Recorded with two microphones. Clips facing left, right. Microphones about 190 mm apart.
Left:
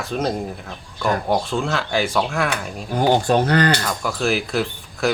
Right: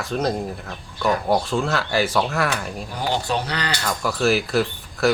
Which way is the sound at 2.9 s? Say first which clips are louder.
Left 8 dB; 50° left (ahead or behind).